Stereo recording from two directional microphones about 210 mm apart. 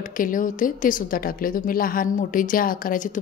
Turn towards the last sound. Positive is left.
turn(degrees=40)  # may be behind; listen again after turning